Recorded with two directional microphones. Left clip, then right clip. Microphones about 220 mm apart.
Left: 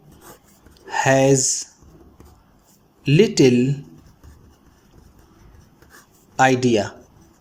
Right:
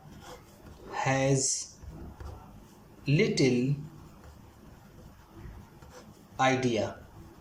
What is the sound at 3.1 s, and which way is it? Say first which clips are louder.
Speech: left 11 dB; 40° left (ahead or behind).